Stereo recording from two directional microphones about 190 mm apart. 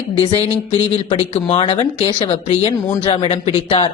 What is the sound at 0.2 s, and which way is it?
Speech, 30° left (ahead or behind).